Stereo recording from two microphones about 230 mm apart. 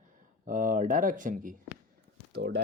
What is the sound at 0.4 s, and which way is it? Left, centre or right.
Speech, right.